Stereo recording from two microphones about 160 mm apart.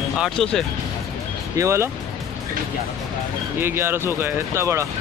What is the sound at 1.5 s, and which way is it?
Speech, 20° right (ahead or behind).